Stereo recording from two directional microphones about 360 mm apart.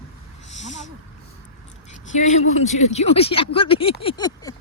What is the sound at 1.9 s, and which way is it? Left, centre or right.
Speech, centre.